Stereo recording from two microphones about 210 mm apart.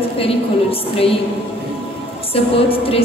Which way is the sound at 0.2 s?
25° left (ahead or behind).